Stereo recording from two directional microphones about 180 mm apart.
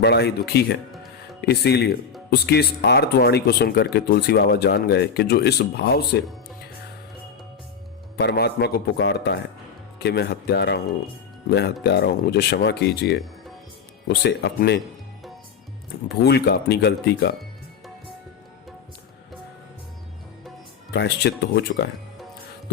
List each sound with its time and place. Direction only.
0.0 s speech: 65° left (ahead or behind)
8.1 s speech: 65° left (ahead or behind)
16.0 s speech: 65° left (ahead or behind)
20.9 s speech: 70° left (ahead or behind)